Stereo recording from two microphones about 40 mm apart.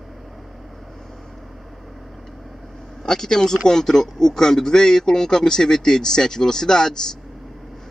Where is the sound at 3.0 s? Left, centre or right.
Centre.